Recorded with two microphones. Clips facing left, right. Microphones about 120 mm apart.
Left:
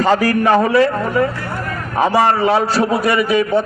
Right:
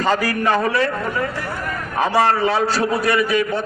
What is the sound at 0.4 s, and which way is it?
Speech, 20° left (ahead or behind).